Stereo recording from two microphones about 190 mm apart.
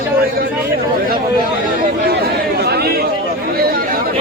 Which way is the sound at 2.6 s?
55° right (ahead or behind).